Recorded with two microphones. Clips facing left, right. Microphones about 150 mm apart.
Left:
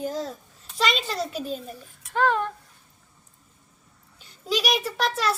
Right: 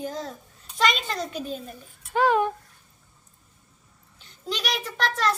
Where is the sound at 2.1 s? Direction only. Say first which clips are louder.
Right 2 dB; 10° right (ahead or behind).